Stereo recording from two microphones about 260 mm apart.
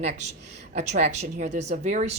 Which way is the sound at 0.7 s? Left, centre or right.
Right.